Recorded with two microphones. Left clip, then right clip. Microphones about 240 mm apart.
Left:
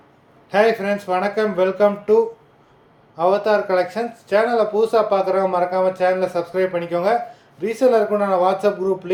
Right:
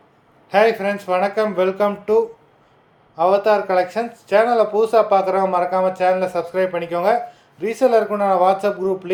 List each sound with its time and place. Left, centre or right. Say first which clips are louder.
0.5 s speech: right 1 dB; centre